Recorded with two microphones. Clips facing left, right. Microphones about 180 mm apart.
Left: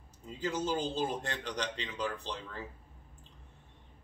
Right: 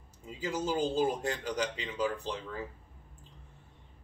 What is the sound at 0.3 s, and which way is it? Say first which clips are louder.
A man's voice: even; 10° right (ahead or behind).